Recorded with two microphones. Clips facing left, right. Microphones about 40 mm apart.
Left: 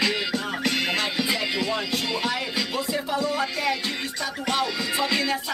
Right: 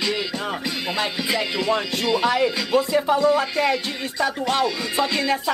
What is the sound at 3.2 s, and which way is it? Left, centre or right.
Speech, centre.